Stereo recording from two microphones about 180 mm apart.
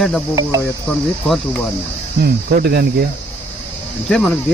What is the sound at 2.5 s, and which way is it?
Cricket, 60° right (ahead or behind).